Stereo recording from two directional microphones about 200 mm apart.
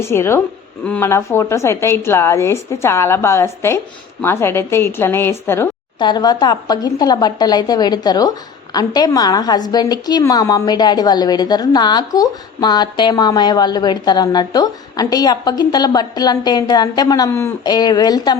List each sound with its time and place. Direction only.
0.1 s a woman's voice: 10° left (ahead or behind)